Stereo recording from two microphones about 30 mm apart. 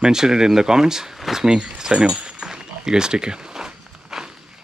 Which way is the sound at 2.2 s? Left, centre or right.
Right.